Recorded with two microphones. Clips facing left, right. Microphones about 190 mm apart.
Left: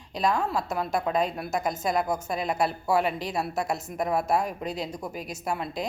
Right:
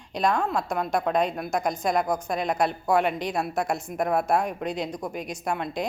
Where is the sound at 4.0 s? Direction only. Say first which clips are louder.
Right 2 dB; 50° right (ahead or behind).